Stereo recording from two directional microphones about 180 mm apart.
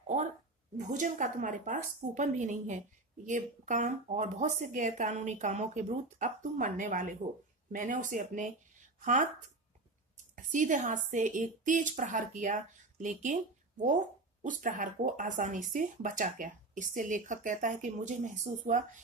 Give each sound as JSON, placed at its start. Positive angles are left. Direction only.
{"t": 0.0, "sound": "a sound", "side_deg": -40}
{"t": 0.7, "sound": "speech", "side_deg": -45}
{"t": 10.3, "sound": "a woman's voice", "side_deg": -45}